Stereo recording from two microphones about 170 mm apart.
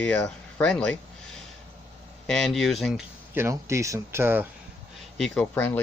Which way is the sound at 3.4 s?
15° right (ahead or behind).